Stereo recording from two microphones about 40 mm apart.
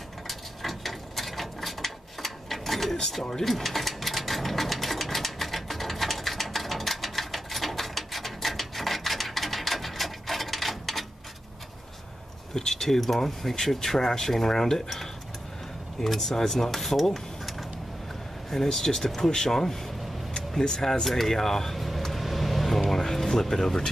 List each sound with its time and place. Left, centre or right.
0.3 s gears: centre
3.4 s sewing machine: centre
12.5 s speech: centre
18.5 s speech: centre
21.0 s speech: centre
21.7 s vehicle: centre